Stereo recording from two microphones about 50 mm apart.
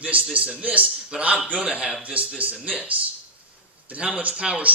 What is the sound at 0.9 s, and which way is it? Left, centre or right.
A man's voice, centre.